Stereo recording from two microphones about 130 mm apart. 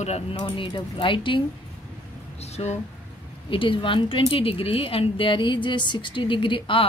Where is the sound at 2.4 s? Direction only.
55° left (ahead or behind).